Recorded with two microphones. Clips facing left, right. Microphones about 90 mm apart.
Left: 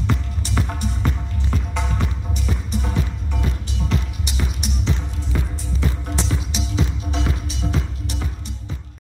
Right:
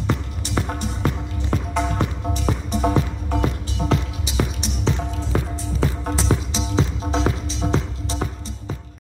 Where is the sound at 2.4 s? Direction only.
65° right (ahead or behind).